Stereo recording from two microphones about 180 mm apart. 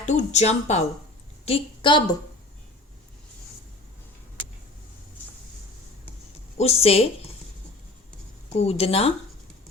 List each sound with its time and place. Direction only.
0.0 s a woman's voice: 40° left (ahead or behind)
6.6 s speech: 35° left (ahead or behind)
8.5 s speech: 35° left (ahead or behind)